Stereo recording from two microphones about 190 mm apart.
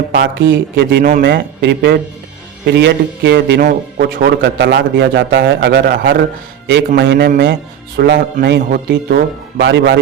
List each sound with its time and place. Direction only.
0.3 s a man's voice: 80° right
1.0 s a man's voice: 50° right (ahead or behind); by 10.0 s 70° right (ahead or behind)